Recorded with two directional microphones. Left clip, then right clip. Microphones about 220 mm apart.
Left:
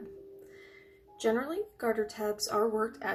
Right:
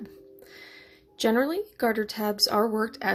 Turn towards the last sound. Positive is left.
turn(degrees=-40)  # may be behind; listen again after turning